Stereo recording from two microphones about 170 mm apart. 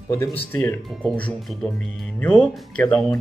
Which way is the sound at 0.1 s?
15° left (ahead or behind).